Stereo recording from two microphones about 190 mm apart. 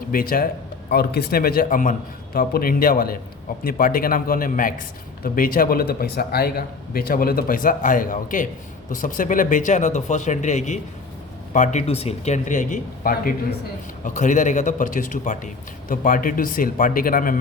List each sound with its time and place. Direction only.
0.1 s speech: 50° left (ahead or behind)